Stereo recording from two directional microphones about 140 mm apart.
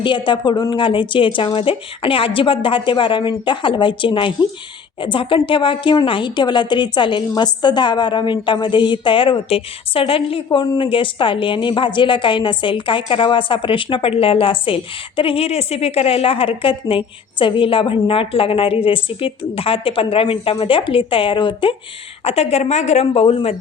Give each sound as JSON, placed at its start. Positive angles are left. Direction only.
{"t": 0.0, "sound": "a woman's voice", "side_deg": 35}